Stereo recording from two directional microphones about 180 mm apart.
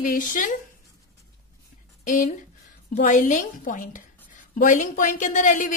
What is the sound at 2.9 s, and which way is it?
A woman's voice, 45° left (ahead or behind).